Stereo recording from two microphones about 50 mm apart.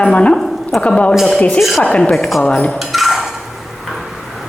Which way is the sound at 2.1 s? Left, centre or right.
Centre.